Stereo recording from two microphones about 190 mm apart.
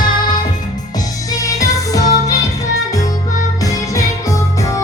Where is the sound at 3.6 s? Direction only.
20° left (ahead or behind).